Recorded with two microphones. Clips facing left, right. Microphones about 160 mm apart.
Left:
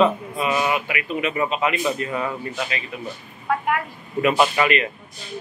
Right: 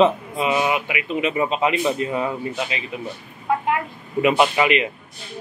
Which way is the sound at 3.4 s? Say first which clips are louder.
Right 1 dB; 20° right (ahead or behind).